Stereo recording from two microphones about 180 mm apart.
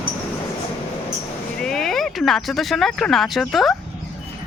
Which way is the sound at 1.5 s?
5° left (ahead or behind).